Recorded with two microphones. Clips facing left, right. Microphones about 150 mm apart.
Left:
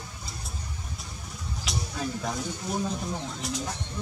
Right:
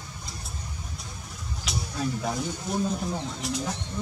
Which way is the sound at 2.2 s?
Centre (ahead or behind).